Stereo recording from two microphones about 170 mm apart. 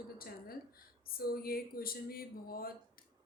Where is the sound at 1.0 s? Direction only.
60° left (ahead or behind).